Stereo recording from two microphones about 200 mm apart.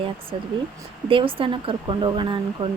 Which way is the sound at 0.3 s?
30° right (ahead or behind).